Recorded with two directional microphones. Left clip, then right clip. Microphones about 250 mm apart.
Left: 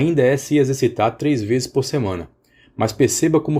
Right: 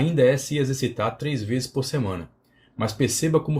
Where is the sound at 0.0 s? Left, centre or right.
Left.